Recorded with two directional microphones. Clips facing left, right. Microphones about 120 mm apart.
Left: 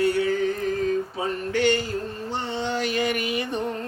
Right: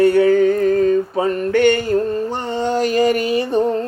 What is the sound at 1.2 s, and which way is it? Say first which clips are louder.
Music: right 9 dB; 55° right (ahead or behind).